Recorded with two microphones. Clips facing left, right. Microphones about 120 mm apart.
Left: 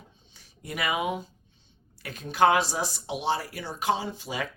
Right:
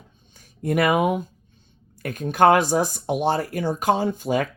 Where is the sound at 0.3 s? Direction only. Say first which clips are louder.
Right 13 dB; 50° right (ahead or behind).